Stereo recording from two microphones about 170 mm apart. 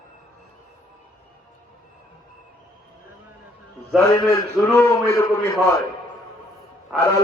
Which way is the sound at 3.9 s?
20° left (ahead or behind).